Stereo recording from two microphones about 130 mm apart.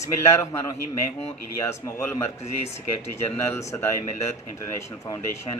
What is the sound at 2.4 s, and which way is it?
Speech, 55° left (ahead or behind).